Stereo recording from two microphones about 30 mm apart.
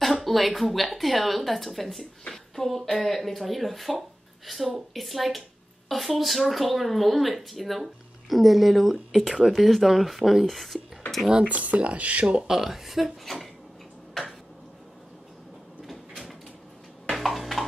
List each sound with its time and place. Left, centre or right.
0.1 s speech: centre
8.9 s speech: centre
9.7 s speech: centre
10.4 s speech: centre
11.4 s speech: right
12.4 s speech: centre
13.0 s speech: centre
15.9 s door: centre
17.1 s a sound: centre